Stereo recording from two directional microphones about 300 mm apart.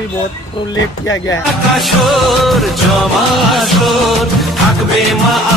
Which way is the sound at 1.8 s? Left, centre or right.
Centre.